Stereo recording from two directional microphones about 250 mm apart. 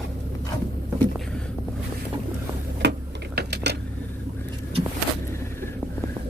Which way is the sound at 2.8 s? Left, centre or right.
Right.